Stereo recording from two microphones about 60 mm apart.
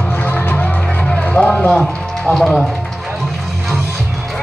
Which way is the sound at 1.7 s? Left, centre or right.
Centre.